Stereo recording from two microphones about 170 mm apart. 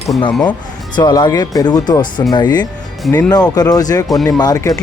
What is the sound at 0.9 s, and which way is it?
Speech, 25° left (ahead or behind).